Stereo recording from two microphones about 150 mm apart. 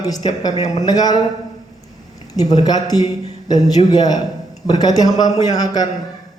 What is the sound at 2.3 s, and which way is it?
A man's voice, 25° left (ahead or behind).